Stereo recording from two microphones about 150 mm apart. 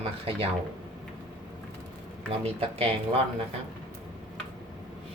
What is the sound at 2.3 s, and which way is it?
Speech, 40° right (ahead or behind).